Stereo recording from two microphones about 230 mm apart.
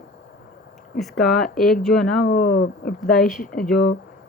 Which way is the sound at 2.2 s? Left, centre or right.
Left.